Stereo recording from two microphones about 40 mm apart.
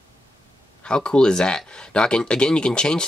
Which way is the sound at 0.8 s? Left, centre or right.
Left.